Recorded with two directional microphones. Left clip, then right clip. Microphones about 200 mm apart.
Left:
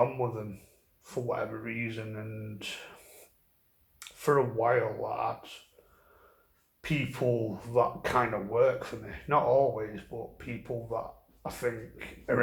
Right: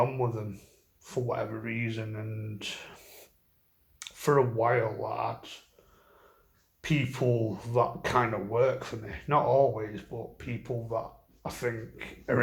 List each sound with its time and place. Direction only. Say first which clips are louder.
0.2 s speech: right 1 dB; 30° right (ahead or behind)
6.8 s speech: right 1 dB; 30° right (ahead or behind)